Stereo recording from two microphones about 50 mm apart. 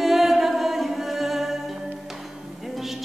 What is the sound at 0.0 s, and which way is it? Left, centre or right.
Music, centre.